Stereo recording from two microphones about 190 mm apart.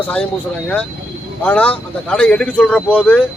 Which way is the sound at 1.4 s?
10° left (ahead or behind).